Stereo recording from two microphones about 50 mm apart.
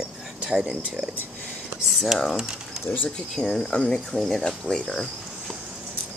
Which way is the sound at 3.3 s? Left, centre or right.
Centre.